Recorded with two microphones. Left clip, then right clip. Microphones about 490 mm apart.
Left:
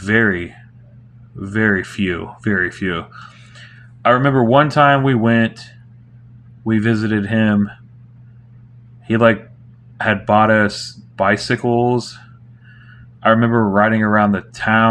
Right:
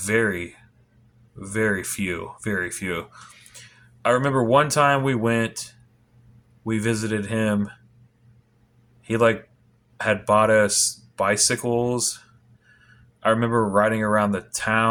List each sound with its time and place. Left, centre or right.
0.0 s speech: right
6.7 s speech: right
9.0 s speech: right
13.2 s speech: right